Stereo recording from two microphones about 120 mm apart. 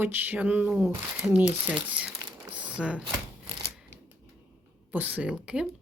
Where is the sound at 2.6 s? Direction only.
10° right (ahead or behind).